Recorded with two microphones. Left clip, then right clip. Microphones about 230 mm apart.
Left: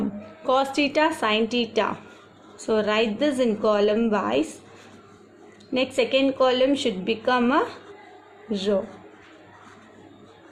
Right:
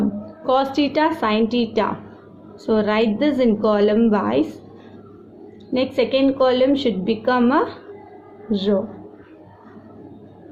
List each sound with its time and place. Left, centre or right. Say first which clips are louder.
0.0 s a woman's voice: right 4 dB; left
5.7 s a woman's voice: right 3 dB; left